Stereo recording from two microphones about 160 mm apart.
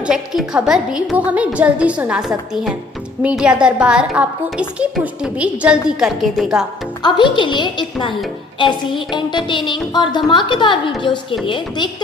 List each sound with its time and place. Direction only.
0.0 s a woman's voice: 5° right (ahead or behind)
7.0 s a woman's voice: 30° left (ahead or behind)